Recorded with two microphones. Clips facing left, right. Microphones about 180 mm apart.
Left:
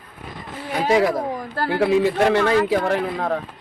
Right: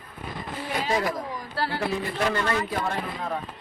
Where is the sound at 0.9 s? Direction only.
75° left (ahead or behind).